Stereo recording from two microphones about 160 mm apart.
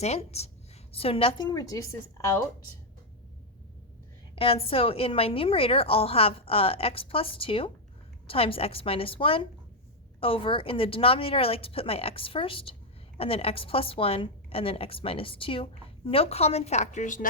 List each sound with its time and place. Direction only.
0.0 s a woman's voice: 40° left (ahead or behind); by 2.5 s 20° left (ahead or behind)
4.4 s a woman's voice: 35° left (ahead or behind); by 17.2 s 50° left (ahead or behind)